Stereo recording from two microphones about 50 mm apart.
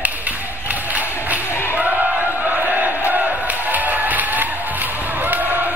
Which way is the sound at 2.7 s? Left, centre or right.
Right.